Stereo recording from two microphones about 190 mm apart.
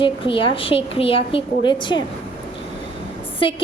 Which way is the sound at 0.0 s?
25° left (ahead or behind).